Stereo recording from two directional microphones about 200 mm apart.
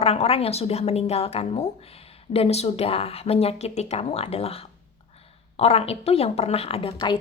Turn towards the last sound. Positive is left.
turn(degrees=25)  # may be behind; listen again after turning